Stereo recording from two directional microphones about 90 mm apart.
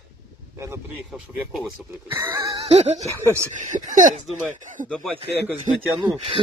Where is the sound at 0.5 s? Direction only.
30° right (ahead or behind).